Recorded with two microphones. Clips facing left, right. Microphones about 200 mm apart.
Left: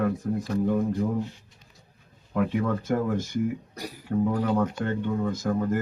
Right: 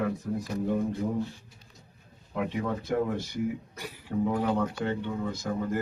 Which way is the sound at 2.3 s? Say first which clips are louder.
Left 5 dB; 50° left (ahead or behind).